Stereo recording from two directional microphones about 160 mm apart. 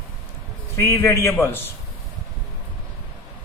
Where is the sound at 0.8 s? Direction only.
20° left (ahead or behind).